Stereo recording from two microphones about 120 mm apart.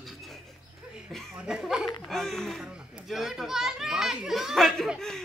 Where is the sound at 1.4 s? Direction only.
5° right (ahead or behind).